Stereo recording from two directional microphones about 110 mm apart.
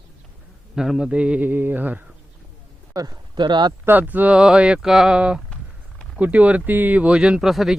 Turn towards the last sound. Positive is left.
turn(degrees=0)  # may be behind; listen again after turning